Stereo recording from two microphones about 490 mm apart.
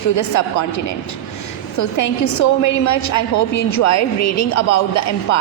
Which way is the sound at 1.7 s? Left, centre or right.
Left.